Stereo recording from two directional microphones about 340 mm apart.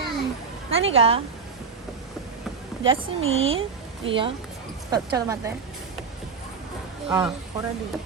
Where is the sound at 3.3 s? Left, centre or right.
Centre.